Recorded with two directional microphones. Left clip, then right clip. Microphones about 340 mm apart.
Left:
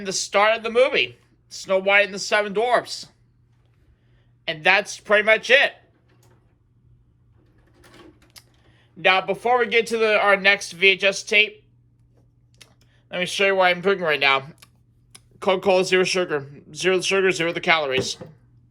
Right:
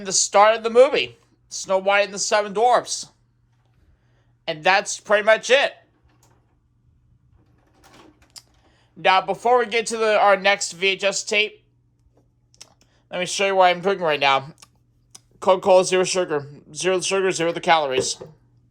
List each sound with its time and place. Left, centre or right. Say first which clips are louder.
0.0 s speech: right 4 dB; centre
4.4 s speech: even; centre
7.8 s speech: left 1 dB; centre